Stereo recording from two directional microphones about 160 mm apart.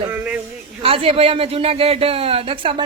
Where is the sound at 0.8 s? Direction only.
35° right (ahead or behind).